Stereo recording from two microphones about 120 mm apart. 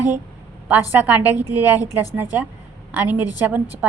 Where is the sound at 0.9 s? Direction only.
15° right (ahead or behind).